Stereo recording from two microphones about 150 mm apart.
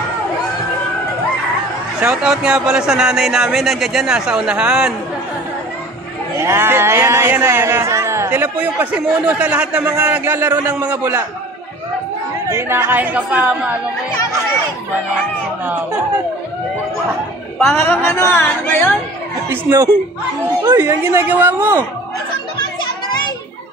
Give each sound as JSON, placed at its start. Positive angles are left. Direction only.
{"t": 2.0, "sound": "speech", "side_deg": -5}
{"t": 6.3, "sound": "speech", "side_deg": -15}
{"t": 12.4, "sound": "speech", "side_deg": -15}
{"t": 15.6, "sound": "speech", "side_deg": -10}
{"t": 17.7, "sound": "speech", "side_deg": 15}
{"t": 19.5, "sound": "speech", "side_deg": -20}